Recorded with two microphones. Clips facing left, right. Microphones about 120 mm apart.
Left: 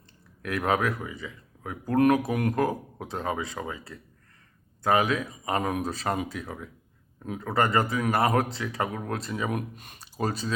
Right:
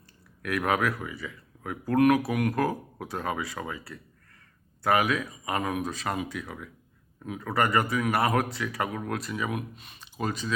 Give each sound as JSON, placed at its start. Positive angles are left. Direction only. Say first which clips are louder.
{"t": 0.4, "sound": "speech", "louder": "left 1 dB", "side_deg": 25}
{"t": 9.5, "sound": "speech", "louder": "left 2 dB", "side_deg": 45}